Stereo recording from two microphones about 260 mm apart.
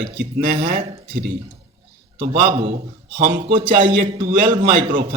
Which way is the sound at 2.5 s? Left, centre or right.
Right.